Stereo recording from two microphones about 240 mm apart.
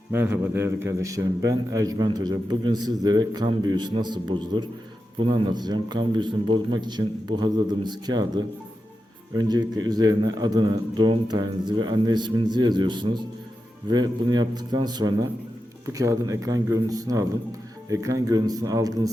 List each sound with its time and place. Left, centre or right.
0.1 s a man's voice: centre